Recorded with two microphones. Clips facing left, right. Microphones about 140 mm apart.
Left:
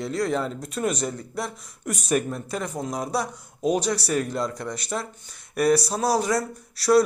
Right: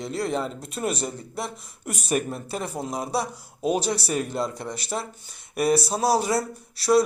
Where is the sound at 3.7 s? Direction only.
25° right (ahead or behind).